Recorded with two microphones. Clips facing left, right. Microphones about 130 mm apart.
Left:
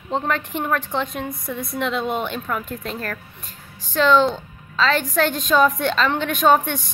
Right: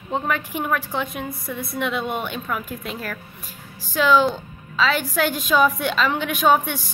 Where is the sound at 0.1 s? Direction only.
5° right (ahead or behind).